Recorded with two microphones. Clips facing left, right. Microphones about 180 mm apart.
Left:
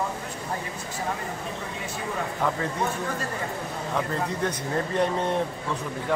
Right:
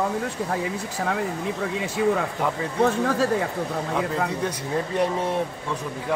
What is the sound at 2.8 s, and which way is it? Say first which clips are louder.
Speech: right 7 dB; 90° right.